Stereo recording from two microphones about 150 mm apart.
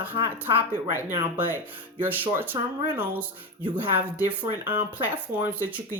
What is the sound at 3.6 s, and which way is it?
Speech, 35° right (ahead or behind).